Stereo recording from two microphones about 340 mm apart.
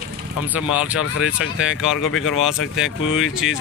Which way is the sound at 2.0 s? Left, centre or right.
Left.